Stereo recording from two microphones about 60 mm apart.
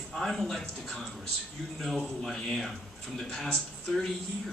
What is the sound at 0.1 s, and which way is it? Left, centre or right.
A man's voice, centre.